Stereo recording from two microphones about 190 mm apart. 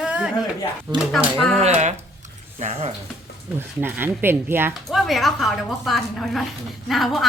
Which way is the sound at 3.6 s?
10° right (ahead or behind).